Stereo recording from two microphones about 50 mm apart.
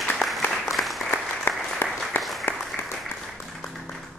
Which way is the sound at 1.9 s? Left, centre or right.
Centre.